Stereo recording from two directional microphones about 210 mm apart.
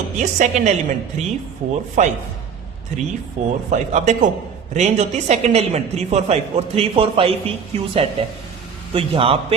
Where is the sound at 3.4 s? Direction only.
35° right (ahead or behind).